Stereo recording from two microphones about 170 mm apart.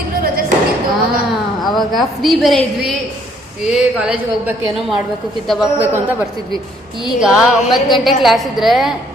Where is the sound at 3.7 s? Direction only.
5° right (ahead or behind).